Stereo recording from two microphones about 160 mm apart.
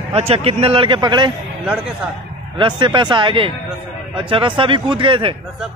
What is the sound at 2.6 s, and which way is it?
A man's voice, 30° right (ahead or behind).